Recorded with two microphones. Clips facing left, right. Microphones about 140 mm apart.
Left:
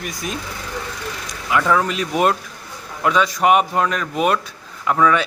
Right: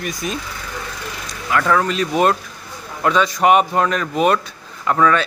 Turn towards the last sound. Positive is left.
turn(degrees=10)  # may be behind; listen again after turning